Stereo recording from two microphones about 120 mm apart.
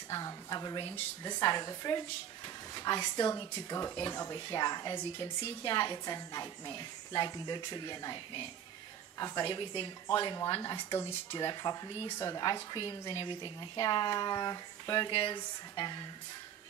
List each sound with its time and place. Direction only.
0.1 s a woman's voice: 30° left (ahead or behind)
9.4 s a woman's voice: 40° left (ahead or behind)
15.0 s a woman's voice: 45° left (ahead or behind)